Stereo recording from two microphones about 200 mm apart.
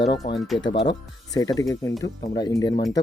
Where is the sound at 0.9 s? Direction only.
20° left (ahead or behind).